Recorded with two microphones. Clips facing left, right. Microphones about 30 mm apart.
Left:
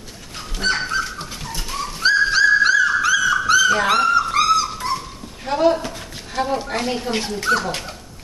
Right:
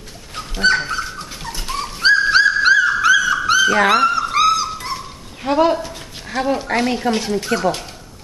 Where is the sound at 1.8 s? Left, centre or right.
Right.